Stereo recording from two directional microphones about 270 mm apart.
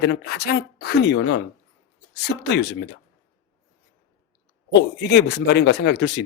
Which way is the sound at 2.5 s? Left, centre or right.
Left.